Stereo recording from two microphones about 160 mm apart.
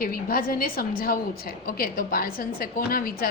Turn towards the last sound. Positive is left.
turn(degrees=65)  # may be behind; listen again after turning